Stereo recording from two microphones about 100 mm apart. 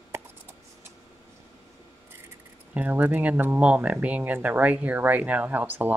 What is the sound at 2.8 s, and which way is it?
Speech, 15° right (ahead or behind).